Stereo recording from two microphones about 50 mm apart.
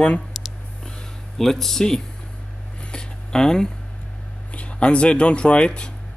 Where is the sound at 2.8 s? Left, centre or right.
Centre.